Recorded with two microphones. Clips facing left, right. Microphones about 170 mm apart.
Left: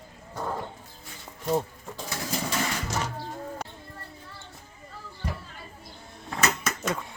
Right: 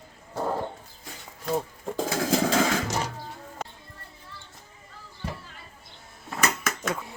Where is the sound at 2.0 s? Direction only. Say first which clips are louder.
Right 8 dB; 90° right.